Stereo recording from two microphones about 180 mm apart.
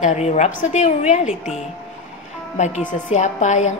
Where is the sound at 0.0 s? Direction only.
40° left (ahead or behind).